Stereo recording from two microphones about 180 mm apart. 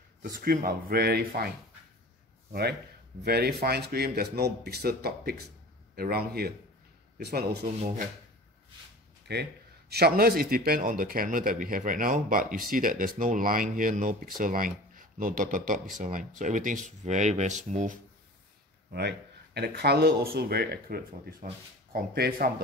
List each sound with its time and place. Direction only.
0.2 s speech: 50° right (ahead or behind)
3.3 s speech: 60° right (ahead or behind)
9.3 s a man's voice: 65° right (ahead or behind); by 17.9 s 40° right (ahead or behind)
18.9 s speech: 65° right (ahead or behind)